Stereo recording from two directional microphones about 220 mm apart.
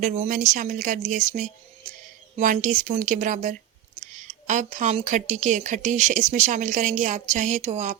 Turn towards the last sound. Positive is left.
turn(degrees=-30)  # may be behind; listen again after turning